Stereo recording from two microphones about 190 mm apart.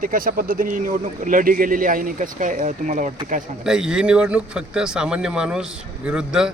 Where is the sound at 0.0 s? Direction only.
45° right (ahead or behind).